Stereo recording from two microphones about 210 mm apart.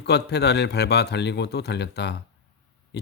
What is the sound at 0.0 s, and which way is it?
Speech, 55° left (ahead or behind).